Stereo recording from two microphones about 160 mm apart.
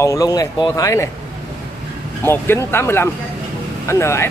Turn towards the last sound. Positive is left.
turn(degrees=15)  # may be behind; listen again after turning